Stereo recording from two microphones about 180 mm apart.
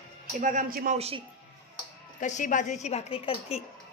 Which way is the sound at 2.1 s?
45° left (ahead or behind).